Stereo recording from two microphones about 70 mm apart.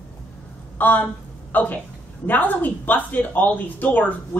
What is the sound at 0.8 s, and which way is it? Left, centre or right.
A woman's voice, left.